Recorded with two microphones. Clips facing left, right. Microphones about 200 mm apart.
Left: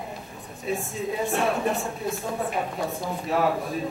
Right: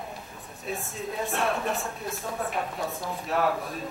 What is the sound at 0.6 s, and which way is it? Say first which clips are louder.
Speech: left 5 dB; centre (ahead or behind).